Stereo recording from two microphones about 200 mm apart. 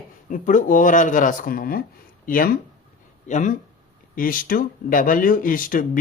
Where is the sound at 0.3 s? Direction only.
40° left (ahead or behind).